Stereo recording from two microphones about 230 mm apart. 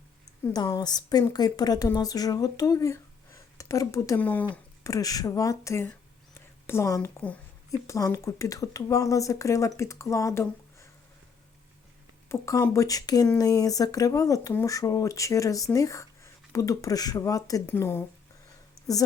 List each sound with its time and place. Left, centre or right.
0.4 s a woman's voice: centre
12.3 s speech: centre